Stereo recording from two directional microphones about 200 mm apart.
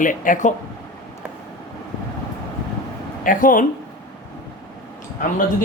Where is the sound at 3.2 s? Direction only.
40° left (ahead or behind).